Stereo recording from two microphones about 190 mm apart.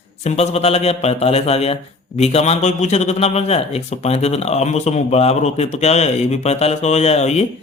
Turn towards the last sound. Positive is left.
turn(degrees=35)  # may be behind; listen again after turning